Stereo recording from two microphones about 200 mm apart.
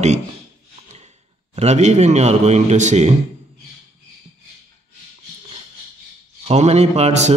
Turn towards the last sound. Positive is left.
turn(degrees=-35)  # may be behind; listen again after turning